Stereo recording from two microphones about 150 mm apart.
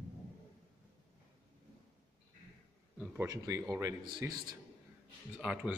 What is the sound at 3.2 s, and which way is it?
Speech, 20° right (ahead or behind).